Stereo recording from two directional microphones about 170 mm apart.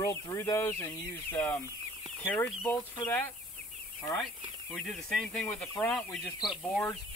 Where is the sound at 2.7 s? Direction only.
10° left (ahead or behind).